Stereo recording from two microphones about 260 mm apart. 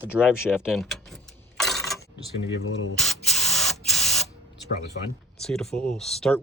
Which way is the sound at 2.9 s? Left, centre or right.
Centre.